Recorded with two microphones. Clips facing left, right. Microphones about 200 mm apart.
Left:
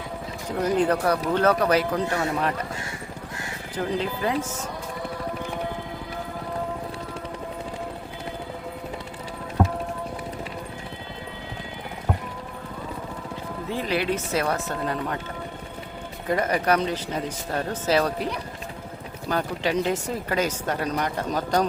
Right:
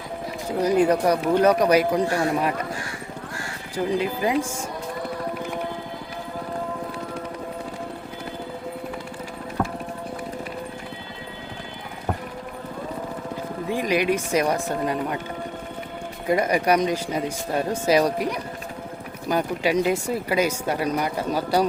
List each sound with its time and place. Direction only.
0.6 s speech: 10° right (ahead or behind)
3.8 s speech: 10° right (ahead or behind)
9.6 s music: 20° left (ahead or behind)
13.7 s speech: 15° right (ahead or behind)
16.2 s speech: 10° right (ahead or behind)